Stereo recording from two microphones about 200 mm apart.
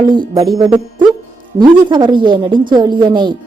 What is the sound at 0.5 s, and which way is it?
Music, 15° right (ahead or behind).